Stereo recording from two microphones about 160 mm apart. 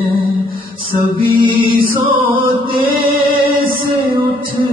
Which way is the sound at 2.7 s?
30° right (ahead or behind).